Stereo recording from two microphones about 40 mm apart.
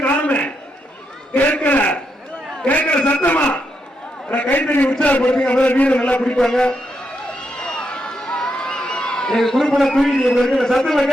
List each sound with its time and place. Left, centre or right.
0.0 s a sound: left
5.0 s a man's voice: left
6.1 s a man's voice: left
6.4 s a man's voice: centre
7.6 s a sound: left
10.6 s a man's voice: centre